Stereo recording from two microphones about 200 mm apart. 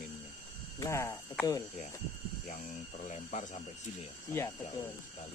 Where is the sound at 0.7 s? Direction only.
15° left (ahead or behind).